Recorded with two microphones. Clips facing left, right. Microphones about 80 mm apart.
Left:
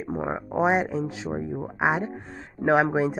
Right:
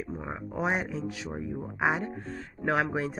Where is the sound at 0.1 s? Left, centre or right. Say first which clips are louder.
Left 8 dB; left.